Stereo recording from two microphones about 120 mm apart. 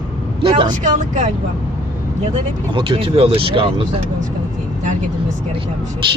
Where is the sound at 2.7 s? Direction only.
45° right (ahead or behind).